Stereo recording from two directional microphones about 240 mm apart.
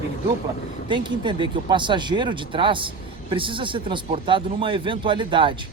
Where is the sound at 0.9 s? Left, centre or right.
Centre.